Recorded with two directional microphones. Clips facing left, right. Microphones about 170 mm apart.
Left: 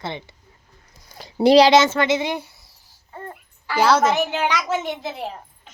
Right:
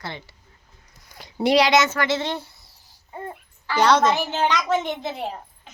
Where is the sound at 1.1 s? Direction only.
30° left (ahead or behind).